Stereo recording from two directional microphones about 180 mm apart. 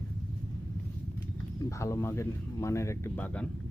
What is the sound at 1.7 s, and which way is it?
Speech, 15° left (ahead or behind).